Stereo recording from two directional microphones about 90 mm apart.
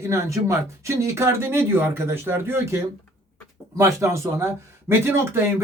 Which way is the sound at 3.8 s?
35° right (ahead or behind).